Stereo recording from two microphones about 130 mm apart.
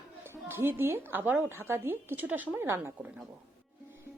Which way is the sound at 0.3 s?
20° right (ahead or behind).